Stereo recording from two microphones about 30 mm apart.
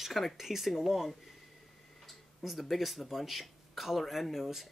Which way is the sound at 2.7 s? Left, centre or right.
Centre.